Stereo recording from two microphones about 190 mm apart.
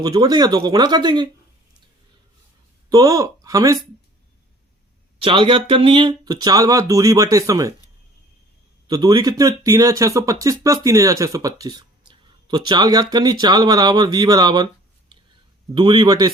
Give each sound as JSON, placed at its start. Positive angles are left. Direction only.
{"t": 0.0, "sound": "speech", "side_deg": -20}
{"t": 2.9, "sound": "speech", "side_deg": -15}
{"t": 5.2, "sound": "speech", "side_deg": -25}
{"t": 8.9, "sound": "speech", "side_deg": -20}
{"t": 15.7, "sound": "speech", "side_deg": -25}